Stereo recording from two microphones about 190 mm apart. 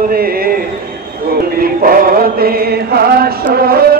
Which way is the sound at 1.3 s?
50° right (ahead or behind).